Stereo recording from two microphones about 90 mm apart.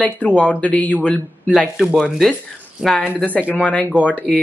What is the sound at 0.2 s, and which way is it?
Speech, 20° left (ahead or behind).